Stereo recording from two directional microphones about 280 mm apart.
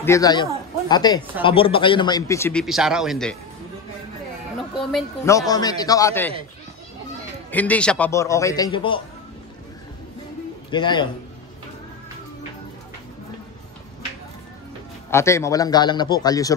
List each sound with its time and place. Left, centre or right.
0.0 s a man's voice: centre
4.7 s speech: centre
5.5 s a man's voice: centre
7.5 s a man's voice: centre
10.7 s a man's voice: centre
15.0 s a man's voice: centre